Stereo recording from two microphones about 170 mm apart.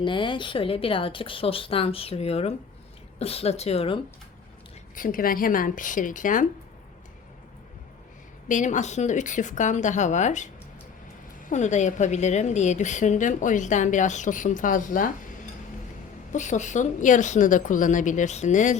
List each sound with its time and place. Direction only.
0.0 s a woman's voice: 25° left (ahead or behind)
4.9 s a woman's voice: 55° left (ahead or behind)
8.4 s a woman's voice: 45° left (ahead or behind)
16.3 s a woman's voice: 45° left (ahead or behind)